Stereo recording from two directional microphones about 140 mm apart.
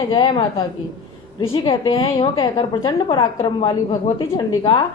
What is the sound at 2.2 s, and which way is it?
A woman's voice, 25° left (ahead or behind).